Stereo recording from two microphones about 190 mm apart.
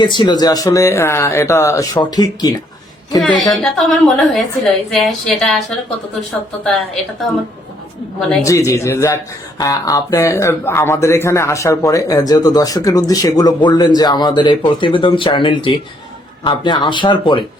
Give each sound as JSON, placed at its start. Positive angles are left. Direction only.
{"t": 0.0, "sound": "speech", "side_deg": 25}
{"t": 3.2, "sound": "a woman's voice", "side_deg": 0}
{"t": 8.4, "sound": "speech", "side_deg": 15}